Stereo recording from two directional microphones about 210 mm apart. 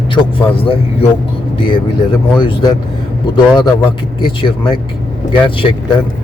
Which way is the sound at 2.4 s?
20° left (ahead or behind).